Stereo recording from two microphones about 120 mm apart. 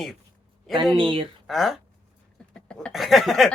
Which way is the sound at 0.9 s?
45° right (ahead or behind).